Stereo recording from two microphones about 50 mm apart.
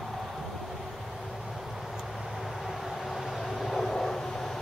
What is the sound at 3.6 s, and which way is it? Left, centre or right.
Vehicle, centre.